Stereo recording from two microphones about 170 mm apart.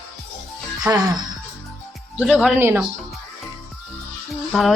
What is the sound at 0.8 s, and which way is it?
Speech, 20° right (ahead or behind).